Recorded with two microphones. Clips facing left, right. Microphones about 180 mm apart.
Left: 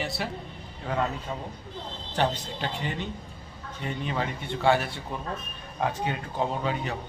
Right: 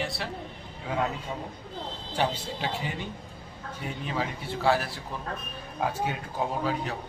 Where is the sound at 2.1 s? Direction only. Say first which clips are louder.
Left 1 dB; 10° right (ahead or behind).